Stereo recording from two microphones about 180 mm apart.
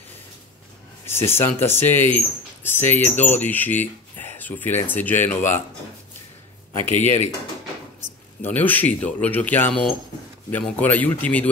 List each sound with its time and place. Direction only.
1.0 s speech: 15° left (ahead or behind)
6.9 s speech: 40° left (ahead or behind)
8.4 s speech: 10° left (ahead or behind)